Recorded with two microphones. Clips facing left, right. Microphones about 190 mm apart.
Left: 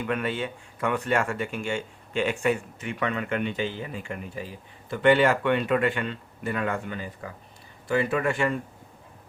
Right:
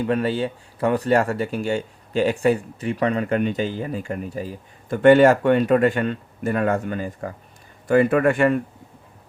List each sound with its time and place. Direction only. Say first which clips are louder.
0.0 s speech: right 7 dB; 35° right (ahead or behind); by 8.6 s 55° right (ahead or behind)